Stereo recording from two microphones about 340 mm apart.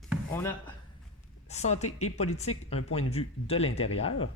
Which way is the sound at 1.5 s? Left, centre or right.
Centre.